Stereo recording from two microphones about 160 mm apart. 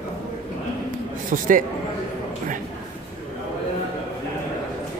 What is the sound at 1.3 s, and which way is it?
Speech, 60° right (ahead or behind).